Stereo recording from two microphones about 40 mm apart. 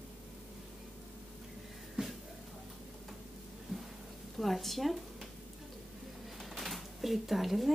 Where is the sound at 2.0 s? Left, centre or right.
Right.